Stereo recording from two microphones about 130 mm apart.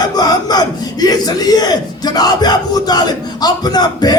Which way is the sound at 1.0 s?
30° left (ahead or behind).